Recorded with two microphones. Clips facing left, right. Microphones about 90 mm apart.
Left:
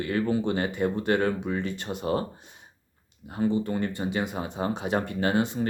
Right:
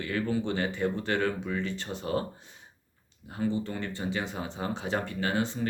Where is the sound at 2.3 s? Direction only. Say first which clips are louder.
Left 2 dB; 20° left (ahead or behind).